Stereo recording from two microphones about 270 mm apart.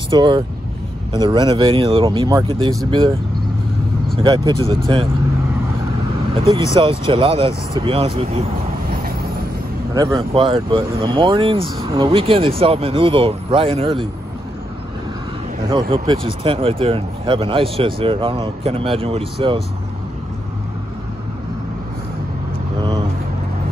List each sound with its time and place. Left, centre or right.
0.1 s speech: centre
4.2 s speech: centre
6.3 s speech: right
9.9 s speech: centre
15.7 s speech: centre